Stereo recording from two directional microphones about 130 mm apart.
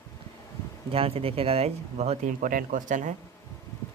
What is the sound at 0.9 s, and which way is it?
Speech, 50° right (ahead or behind).